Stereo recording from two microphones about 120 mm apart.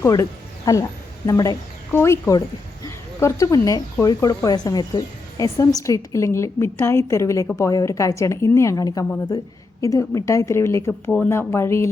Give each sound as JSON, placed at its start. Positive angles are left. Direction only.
{"t": 0.0, "sound": "a woman's voice", "side_deg": 25}